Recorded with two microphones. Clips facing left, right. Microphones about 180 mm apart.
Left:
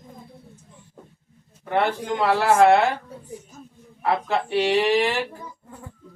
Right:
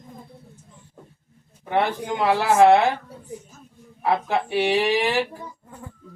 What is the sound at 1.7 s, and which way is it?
A man's voice, 10° right (ahead or behind).